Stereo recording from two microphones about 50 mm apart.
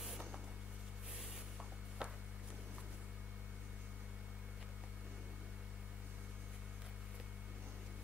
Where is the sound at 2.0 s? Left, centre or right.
Centre.